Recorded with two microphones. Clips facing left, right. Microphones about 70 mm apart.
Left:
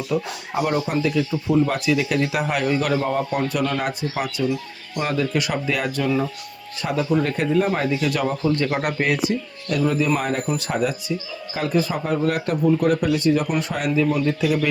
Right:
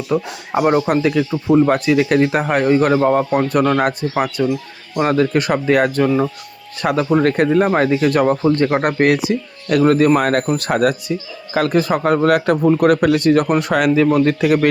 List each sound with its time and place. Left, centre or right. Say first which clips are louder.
0.1 s speech: right 6 dB; right
6.7 s speech: right 5 dB; right
9.0 s speech: right 6 dB; right
14.3 s speech: right 6 dB; right